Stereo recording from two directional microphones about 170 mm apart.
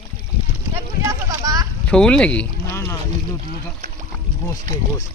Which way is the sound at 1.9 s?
5° left (ahead or behind).